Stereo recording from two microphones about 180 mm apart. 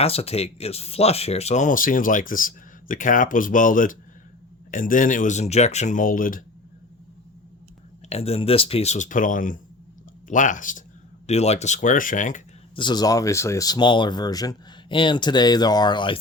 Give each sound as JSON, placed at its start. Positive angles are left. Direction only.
{"t": 0.0, "sound": "speech", "side_deg": 35}
{"t": 8.1, "sound": "speech", "side_deg": 35}
{"t": 12.7, "sound": "speech", "side_deg": 25}